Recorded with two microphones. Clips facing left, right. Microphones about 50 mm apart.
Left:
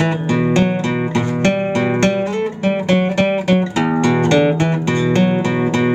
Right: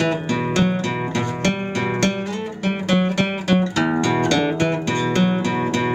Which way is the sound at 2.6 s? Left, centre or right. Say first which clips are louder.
Left 3 dB; centre.